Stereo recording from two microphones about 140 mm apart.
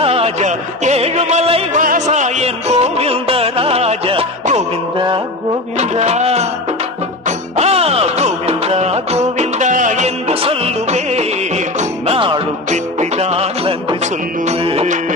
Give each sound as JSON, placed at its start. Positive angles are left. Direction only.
{"t": 0.0, "sound": "music", "side_deg": -45}
{"t": 1.7, "sound": "music", "side_deg": -70}
{"t": 5.8, "sound": "music", "side_deg": -50}
{"t": 12.1, "sound": "music", "side_deg": -40}